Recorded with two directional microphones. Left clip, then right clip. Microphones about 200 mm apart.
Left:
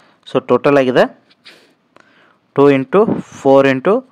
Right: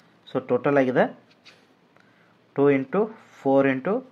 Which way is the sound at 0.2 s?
35° left (ahead or behind).